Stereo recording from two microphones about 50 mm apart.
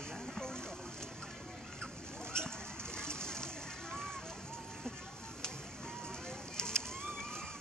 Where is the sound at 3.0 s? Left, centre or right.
Centre.